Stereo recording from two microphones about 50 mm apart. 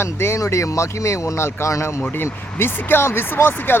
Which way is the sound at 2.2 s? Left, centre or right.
Left.